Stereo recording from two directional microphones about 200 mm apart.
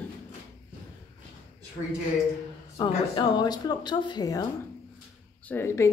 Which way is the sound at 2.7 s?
20° left (ahead or behind).